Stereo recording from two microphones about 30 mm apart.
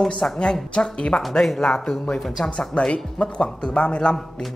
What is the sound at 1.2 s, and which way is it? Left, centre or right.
Speech, centre.